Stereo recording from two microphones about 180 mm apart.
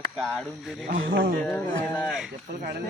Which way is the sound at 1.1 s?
55° right (ahead or behind).